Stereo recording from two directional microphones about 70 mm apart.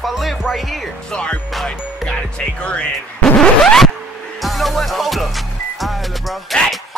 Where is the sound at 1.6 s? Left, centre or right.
Centre.